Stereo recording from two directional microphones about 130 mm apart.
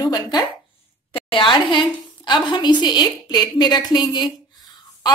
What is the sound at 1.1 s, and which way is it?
A woman's voice, 40° left (ahead or behind).